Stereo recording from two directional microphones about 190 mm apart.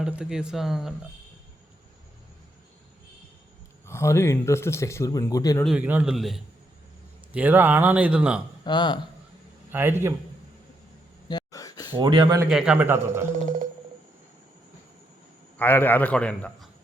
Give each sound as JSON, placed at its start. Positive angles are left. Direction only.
{"t": 0.0, "sound": "speech", "side_deg": -5}
{"t": 3.8, "sound": "speech", "side_deg": 15}
{"t": 5.6, "sound": "speech", "side_deg": -5}
{"t": 8.6, "sound": "speech", "side_deg": 25}
{"t": 9.7, "sound": "speech", "side_deg": -10}
{"t": 11.3, "sound": "a sound", "side_deg": 20}
{"t": 11.9, "sound": "speech", "side_deg": -25}
{"t": 12.5, "sound": "speech", "side_deg": -5}
{"t": 15.5, "sound": "speech", "side_deg": 10}